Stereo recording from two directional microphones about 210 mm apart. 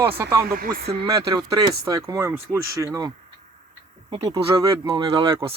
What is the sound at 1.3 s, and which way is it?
Speech, 15° right (ahead or behind).